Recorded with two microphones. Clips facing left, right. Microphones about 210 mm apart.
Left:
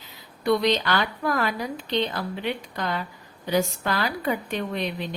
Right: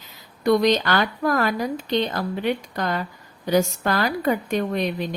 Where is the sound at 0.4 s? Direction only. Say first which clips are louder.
Right 4 dB; 45° right (ahead or behind).